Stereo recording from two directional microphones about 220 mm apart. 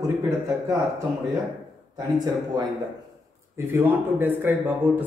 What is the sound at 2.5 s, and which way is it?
A man's voice, 20° right (ahead or behind).